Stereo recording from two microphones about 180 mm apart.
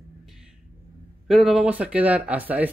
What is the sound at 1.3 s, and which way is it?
Speech, centre (ahead or behind).